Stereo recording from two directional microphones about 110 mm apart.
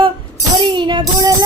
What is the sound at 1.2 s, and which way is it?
Music, 30° right (ahead or behind).